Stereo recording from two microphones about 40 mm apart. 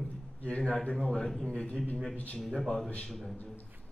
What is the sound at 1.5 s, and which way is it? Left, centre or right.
Speech, left.